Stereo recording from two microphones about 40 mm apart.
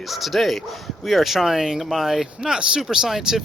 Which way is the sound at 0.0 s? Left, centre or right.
Centre.